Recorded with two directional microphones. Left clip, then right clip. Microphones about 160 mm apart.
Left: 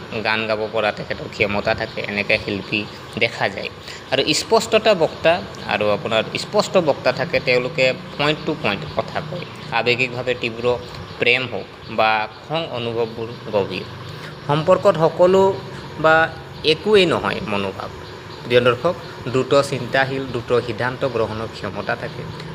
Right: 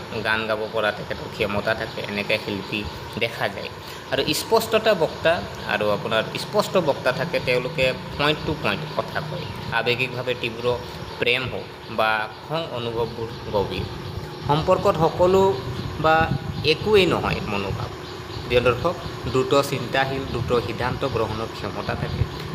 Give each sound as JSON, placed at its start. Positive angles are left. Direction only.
{"t": 0.2, "sound": "speech", "side_deg": 20}